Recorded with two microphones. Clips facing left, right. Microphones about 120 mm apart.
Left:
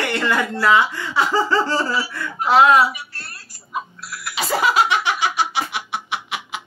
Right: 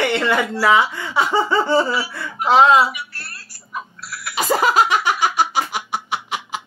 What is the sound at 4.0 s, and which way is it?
Music, centre (ahead or behind).